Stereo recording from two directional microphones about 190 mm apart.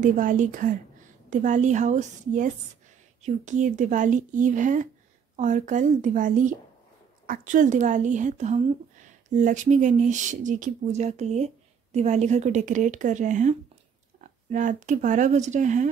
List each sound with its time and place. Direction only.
0.0 s a woman's voice: 40° right (ahead or behind)